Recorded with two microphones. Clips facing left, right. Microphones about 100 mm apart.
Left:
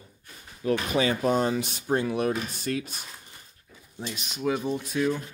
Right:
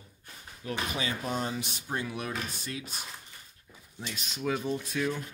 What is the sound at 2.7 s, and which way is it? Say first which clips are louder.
Speech: left 13 dB; 60° left (ahead or behind).